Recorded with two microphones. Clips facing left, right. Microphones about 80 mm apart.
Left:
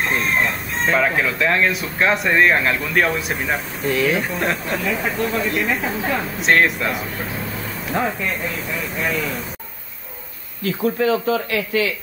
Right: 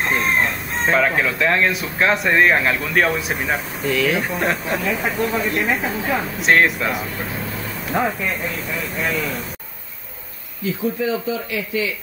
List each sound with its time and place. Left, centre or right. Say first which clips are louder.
0.9 s speech: right 1 dB; centre
10.6 s speech: left 2 dB; left